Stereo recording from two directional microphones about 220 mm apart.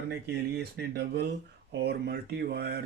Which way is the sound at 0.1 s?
45° right (ahead or behind).